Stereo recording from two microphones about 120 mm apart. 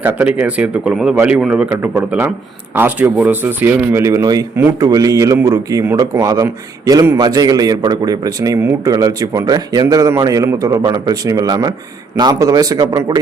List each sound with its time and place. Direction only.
0.0 s a man's voice: 10° right (ahead or behind); by 4.4 s 30° right (ahead or behind)
4.5 s a man's voice: 20° right (ahead or behind)
4.9 s a man's voice: 30° right (ahead or behind)